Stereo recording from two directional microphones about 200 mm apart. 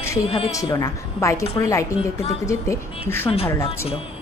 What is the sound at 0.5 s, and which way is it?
Speech, 15° left (ahead or behind).